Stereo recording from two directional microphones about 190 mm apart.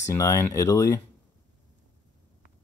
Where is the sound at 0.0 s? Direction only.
15° left (ahead or behind).